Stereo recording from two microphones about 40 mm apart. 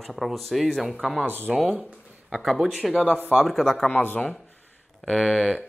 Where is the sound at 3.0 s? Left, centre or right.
Right.